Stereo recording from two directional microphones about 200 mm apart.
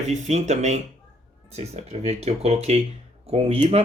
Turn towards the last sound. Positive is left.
turn(degrees=-30)  # may be behind; listen again after turning